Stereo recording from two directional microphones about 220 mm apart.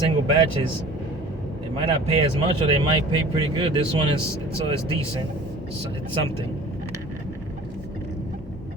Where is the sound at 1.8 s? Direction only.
25° right (ahead or behind).